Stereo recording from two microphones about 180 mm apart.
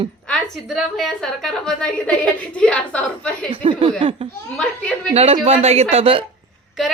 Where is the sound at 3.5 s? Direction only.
30° right (ahead or behind).